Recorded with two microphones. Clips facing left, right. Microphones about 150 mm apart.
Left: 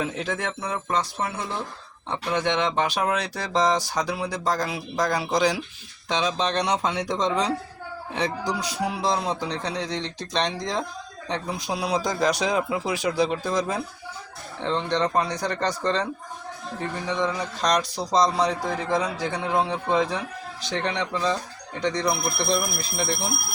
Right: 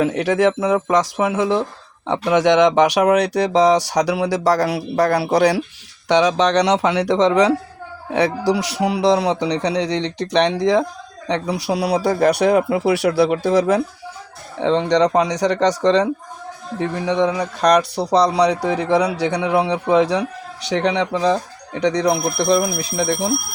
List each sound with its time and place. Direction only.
0.0 s a man's voice: 75° right (ahead or behind)
16.8 s a man's voice: 70° right (ahead or behind)